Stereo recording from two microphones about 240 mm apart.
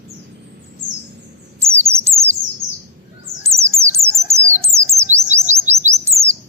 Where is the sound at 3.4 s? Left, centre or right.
Centre.